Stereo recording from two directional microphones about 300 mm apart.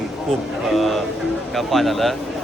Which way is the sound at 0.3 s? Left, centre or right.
Centre.